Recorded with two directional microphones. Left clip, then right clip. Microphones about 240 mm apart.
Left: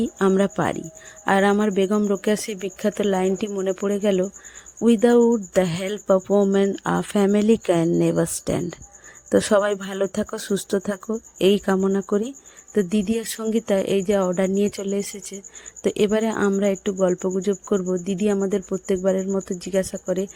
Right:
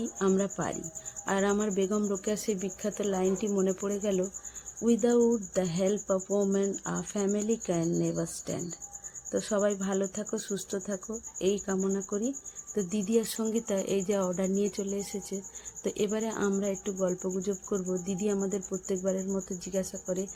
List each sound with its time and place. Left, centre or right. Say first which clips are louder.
0.0 s speech: left 9 dB; left